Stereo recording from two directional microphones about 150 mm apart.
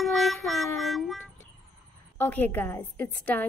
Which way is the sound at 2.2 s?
10° left (ahead or behind).